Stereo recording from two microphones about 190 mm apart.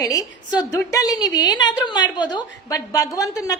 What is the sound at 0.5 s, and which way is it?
A woman's voice, 15° left (ahead or behind).